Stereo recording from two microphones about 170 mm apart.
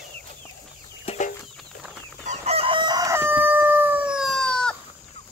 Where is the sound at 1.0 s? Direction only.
40° left (ahead or behind).